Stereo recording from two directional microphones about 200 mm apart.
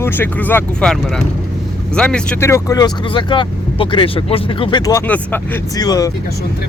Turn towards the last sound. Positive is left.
turn(degrees=20)  # may be behind; listen again after turning